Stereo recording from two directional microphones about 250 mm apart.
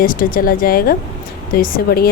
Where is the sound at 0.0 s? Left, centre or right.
Left.